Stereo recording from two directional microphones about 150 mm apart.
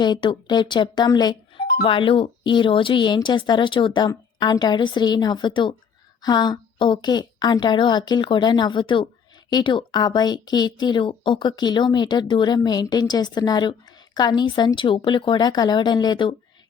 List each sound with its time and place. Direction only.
0.0 s speech: 30° left (ahead or behind)